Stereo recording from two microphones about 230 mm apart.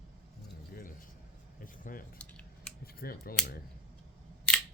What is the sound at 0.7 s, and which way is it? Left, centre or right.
Keys jangling, left.